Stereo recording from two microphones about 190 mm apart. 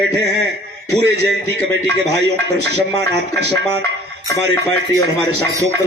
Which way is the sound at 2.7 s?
60° right (ahead or behind).